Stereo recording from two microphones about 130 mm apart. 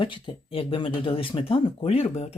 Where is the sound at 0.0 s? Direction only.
40° left (ahead or behind).